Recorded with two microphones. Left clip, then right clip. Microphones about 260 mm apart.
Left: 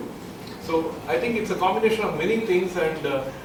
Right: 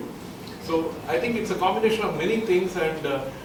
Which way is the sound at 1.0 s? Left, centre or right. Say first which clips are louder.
Left 1 dB; centre.